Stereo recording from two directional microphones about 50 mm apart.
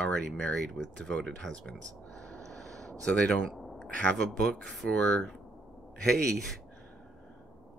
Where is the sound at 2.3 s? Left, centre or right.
Centre.